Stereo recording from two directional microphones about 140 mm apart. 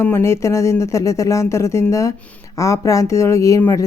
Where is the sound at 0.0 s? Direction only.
20° left (ahead or behind).